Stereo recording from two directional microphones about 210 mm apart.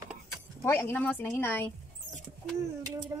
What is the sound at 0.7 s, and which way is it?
Speech, 10° left (ahead or behind).